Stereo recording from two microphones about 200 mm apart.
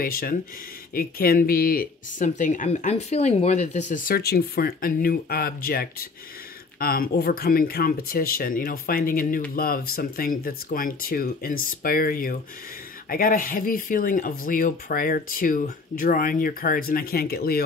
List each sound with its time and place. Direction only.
0.0 s speech: 45° left (ahead or behind)